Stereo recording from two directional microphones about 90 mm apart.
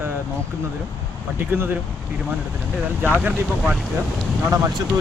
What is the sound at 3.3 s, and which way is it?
Speech, centre (ahead or behind).